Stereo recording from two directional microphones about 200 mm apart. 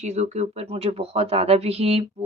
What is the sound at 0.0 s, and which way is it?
A woman's voice, 35° right (ahead or behind).